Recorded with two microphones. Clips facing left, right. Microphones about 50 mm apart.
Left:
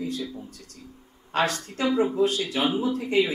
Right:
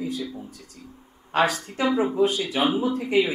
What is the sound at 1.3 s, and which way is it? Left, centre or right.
Speech, centre.